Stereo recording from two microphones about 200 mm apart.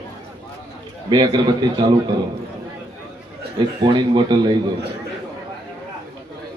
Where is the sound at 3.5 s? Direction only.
20° right (ahead or behind).